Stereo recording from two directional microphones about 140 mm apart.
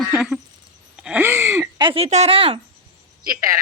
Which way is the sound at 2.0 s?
50° right (ahead or behind).